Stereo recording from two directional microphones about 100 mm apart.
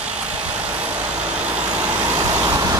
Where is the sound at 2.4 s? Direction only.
35° right (ahead or behind).